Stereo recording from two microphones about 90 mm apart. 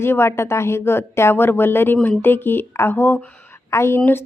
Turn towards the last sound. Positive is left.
turn(degrees=30)  # may be behind; listen again after turning